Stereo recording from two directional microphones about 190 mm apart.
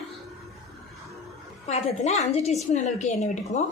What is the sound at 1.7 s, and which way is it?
A woman's voice, 35° left (ahead or behind).